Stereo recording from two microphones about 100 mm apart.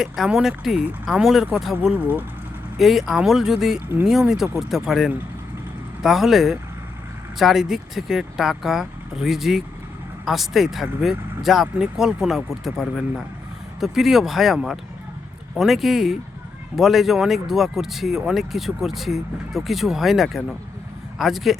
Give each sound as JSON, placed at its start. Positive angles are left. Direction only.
{"t": 0.0, "sound": "speech", "side_deg": -5}
{"t": 1.8, "sound": "speech", "side_deg": -15}
{"t": 2.7, "sound": "speech", "side_deg": 0}